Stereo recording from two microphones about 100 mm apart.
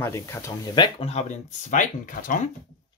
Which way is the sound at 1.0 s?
90° left.